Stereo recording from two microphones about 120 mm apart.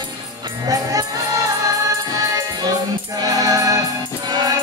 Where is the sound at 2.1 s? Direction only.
30° right (ahead or behind).